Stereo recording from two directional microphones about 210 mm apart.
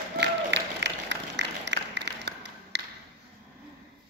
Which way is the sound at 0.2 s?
55° right (ahead or behind).